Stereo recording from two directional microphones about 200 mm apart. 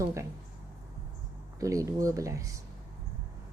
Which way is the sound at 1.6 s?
15° right (ahead or behind).